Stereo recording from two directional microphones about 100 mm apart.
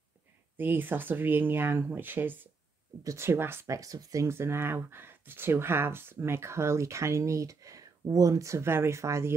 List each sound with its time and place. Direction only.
0.6 s speech: 20° right (ahead or behind)
3.0 s speech: 30° right (ahead or behind)